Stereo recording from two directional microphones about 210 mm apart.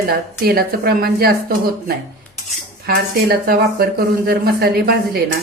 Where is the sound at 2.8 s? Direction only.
45° right (ahead or behind).